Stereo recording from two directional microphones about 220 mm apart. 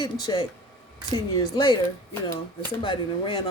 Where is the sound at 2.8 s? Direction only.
20° left (ahead or behind).